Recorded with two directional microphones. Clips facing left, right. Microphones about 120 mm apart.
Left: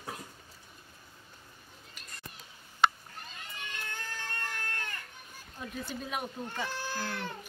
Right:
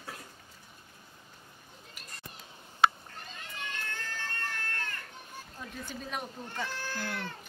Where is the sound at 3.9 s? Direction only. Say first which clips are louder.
Right 1 dB; 15° left (ahead or behind).